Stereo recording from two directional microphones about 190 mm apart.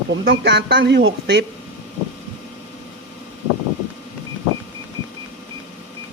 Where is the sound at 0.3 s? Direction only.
60° right (ahead or behind).